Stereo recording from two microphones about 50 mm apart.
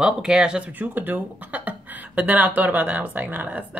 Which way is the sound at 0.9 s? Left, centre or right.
Right.